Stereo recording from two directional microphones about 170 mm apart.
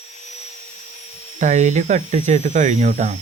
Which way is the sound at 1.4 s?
45° right (ahead or behind).